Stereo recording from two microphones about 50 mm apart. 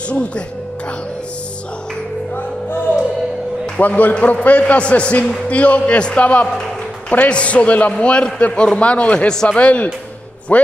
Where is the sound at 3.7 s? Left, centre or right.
Left.